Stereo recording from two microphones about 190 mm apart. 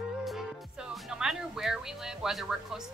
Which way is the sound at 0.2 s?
Centre (ahead or behind).